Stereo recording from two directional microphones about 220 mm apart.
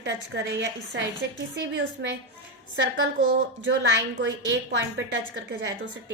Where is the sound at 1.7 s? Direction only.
55° right (ahead or behind).